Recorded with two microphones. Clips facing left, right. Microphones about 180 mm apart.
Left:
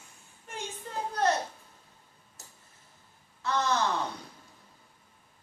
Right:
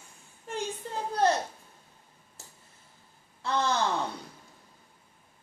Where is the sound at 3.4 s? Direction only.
30° right (ahead or behind).